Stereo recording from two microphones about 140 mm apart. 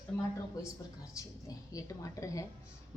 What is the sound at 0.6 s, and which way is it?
Speech, 25° left (ahead or behind).